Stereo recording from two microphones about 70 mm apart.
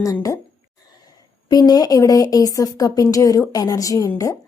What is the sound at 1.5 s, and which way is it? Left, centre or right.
Speech, left.